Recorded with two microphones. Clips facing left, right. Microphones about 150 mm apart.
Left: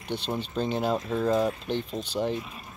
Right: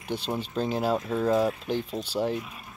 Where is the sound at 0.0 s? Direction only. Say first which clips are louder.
Even; 10° right (ahead or behind).